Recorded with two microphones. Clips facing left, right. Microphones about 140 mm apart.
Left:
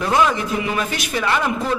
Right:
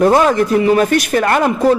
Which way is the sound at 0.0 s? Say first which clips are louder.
Right 7 dB; 45° right (ahead or behind).